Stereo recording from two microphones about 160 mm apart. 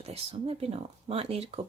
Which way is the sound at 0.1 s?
40° right (ahead or behind).